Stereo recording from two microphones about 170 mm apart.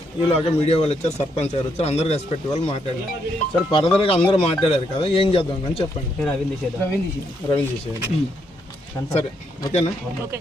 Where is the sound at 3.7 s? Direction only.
30° left (ahead or behind).